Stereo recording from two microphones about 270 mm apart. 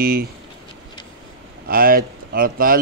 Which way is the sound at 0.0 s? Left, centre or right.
Right.